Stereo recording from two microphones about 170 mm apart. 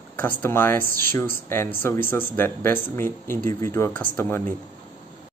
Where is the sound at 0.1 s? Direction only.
10° left (ahead or behind).